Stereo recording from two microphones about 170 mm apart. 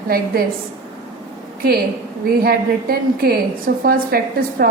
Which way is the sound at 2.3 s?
65° right (ahead or behind).